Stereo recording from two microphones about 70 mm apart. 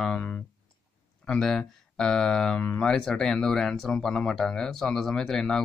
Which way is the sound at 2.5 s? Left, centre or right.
Left.